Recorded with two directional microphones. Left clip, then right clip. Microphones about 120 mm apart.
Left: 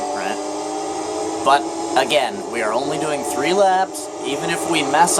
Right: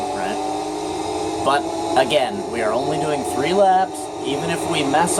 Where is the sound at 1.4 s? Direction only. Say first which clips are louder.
Left 4 dB; 45° left (ahead or behind).